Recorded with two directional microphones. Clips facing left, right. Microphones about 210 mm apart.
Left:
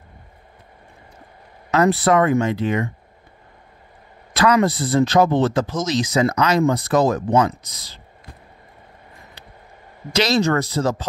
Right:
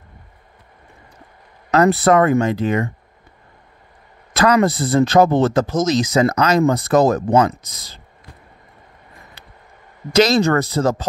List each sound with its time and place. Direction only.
1.7 s speech: 40° right (ahead or behind)
4.4 s speech: 45° right (ahead or behind)
10.1 s speech: 50° right (ahead or behind)